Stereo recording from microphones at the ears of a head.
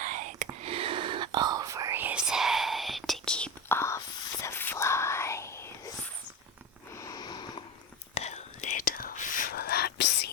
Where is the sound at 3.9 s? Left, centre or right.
Left.